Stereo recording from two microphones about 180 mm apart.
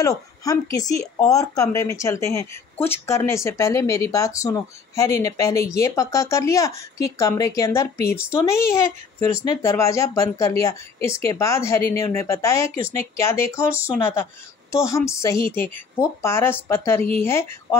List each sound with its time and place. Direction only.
0.0 s speech: 20° left (ahead or behind)
9.2 s speech: 35° right (ahead or behind)
9.6 s speech: 15° left (ahead or behind)